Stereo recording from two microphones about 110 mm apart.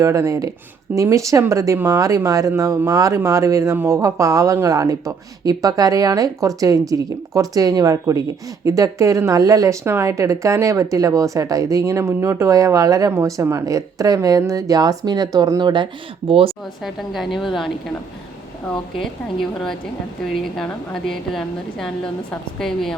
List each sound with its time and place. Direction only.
0.0 s speech: 30° right (ahead or behind); by 16.6 s 60° right (ahead or behind)
16.8 s speech: centre (ahead or behind)